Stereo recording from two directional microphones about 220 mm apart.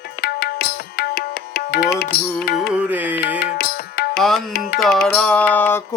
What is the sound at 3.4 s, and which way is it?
Music, 45° left (ahead or behind).